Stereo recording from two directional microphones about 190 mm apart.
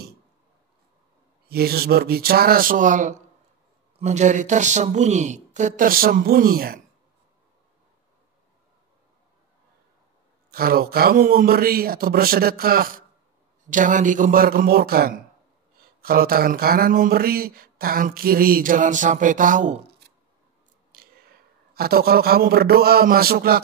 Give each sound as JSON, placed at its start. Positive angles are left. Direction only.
{"t": 1.5, "sound": "speech", "side_deg": -55}
{"t": 10.5, "sound": "speech", "side_deg": -50}
{"t": 20.9, "sound": "a sound", "side_deg": -50}
{"t": 21.7, "sound": "speech", "side_deg": -55}